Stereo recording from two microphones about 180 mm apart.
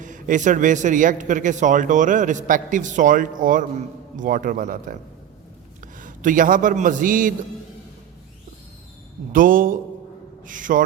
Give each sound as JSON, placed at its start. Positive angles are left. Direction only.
{"t": 0.0, "sound": "a man's voice", "side_deg": -45}
{"t": 9.3, "sound": "a man's voice", "side_deg": -50}